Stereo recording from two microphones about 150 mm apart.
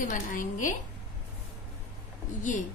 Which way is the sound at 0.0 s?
60° left (ahead or behind).